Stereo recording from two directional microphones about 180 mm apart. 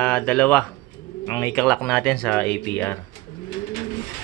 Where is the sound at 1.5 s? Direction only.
5° left (ahead or behind).